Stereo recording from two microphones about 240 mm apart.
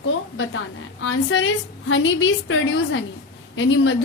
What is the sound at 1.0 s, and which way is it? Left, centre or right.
A woman's voice, left.